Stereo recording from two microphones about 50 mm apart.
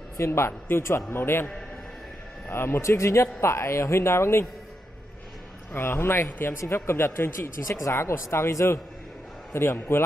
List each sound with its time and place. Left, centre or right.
0.2 s a man's voice: left
2.5 s speech: left
2.8 s a man's voice: left
5.7 s a man's voice: left